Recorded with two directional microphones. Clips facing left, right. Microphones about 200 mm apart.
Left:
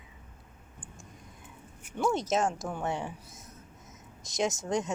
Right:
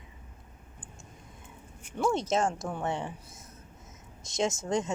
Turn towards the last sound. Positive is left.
turn(degrees=0)  # may be behind; listen again after turning